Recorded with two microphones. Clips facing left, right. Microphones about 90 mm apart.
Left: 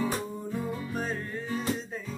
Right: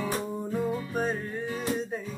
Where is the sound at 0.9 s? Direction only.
15° right (ahead or behind).